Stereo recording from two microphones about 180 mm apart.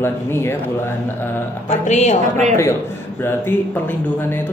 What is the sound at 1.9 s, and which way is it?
Speech, 40° left (ahead or behind).